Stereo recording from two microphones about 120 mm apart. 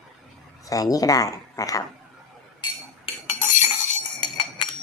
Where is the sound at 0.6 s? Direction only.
30° left (ahead or behind).